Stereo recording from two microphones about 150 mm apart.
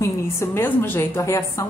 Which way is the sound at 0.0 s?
15° left (ahead or behind).